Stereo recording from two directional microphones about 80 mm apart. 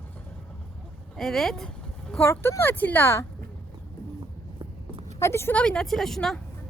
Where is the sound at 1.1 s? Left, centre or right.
Centre.